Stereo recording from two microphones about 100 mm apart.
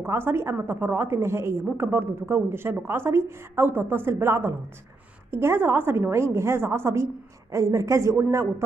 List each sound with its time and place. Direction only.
0.0 s a woman's voice: 25° right (ahead or behind)